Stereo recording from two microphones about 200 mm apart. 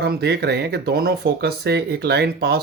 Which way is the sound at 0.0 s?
55° right (ahead or behind).